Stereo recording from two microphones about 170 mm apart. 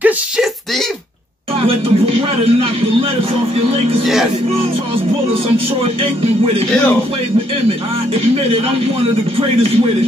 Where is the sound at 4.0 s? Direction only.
Centre (ahead or behind).